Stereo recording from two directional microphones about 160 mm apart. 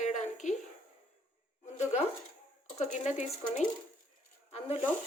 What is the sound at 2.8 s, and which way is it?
Speech, 45° left (ahead or behind).